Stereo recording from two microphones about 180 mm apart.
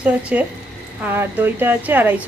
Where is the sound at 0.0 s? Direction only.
10° right (ahead or behind).